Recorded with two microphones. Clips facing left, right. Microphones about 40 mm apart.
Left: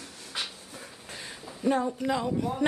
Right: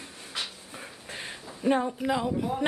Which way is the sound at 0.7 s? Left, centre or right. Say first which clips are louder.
Right 2 dB; right.